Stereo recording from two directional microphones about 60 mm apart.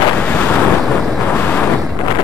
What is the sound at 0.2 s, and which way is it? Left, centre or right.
Wind noise, left.